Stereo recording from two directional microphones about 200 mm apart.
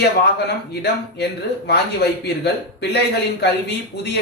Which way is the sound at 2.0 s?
55° left (ahead or behind).